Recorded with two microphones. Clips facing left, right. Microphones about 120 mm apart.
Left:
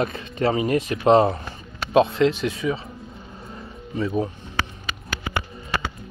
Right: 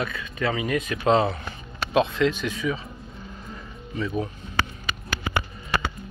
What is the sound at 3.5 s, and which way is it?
Music, 30° left (ahead or behind).